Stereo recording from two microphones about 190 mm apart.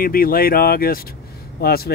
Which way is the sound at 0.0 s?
50° left (ahead or behind).